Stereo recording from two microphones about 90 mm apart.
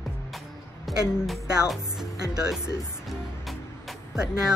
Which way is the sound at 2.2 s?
45° right (ahead or behind).